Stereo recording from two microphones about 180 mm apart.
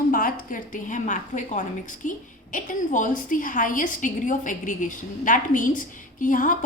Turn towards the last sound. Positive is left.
turn(degrees=50)  # may be behind; listen again after turning